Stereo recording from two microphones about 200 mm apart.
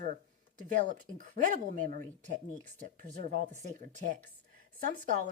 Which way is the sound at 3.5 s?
40° right (ahead or behind).